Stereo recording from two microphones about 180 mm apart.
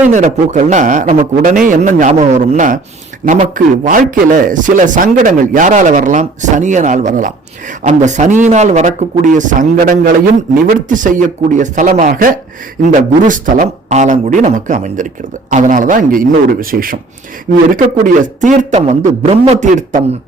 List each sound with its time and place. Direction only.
0.0 s a man's voice: 40° right (ahead or behind)